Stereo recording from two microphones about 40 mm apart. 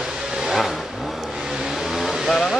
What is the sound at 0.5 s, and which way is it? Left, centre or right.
Vehicle, centre.